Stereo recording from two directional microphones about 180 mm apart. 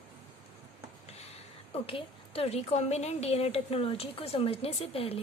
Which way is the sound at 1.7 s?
30° left (ahead or behind).